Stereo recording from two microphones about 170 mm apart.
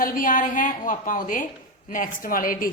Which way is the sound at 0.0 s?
50° left (ahead or behind).